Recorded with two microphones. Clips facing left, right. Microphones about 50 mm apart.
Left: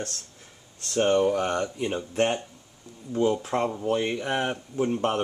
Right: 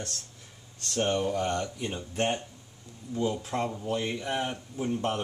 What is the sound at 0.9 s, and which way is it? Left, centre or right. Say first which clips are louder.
Speech: left 6 dB; left.